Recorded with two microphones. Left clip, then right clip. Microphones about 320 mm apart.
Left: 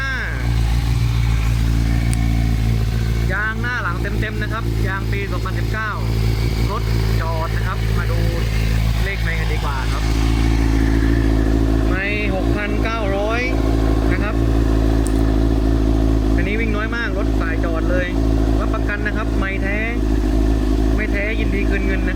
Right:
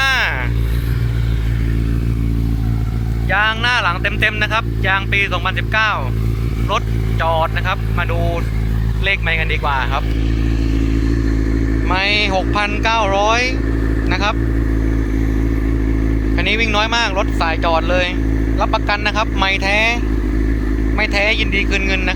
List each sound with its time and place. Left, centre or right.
0.0 s vehicle: centre
3.3 s speech: centre
11.9 s speech: centre
12.8 s speech: right
16.6 s speech: centre
21.0 s speech: centre